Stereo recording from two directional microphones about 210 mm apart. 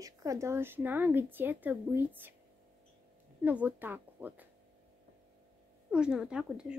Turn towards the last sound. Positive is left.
turn(degrees=-5)  # may be behind; listen again after turning